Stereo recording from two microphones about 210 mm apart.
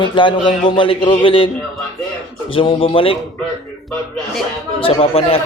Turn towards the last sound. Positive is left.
turn(degrees=30)  # may be behind; listen again after turning